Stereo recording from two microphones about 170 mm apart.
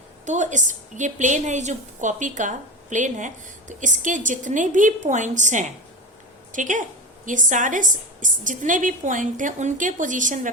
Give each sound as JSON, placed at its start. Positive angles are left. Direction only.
{"t": 0.3, "sound": "a woman's voice", "side_deg": -45}